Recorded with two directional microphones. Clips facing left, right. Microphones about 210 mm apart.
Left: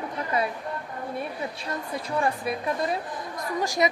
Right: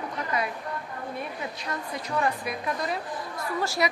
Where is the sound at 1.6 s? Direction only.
30° left (ahead or behind).